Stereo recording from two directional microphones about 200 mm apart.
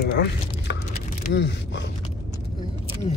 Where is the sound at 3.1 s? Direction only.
35° left (ahead or behind).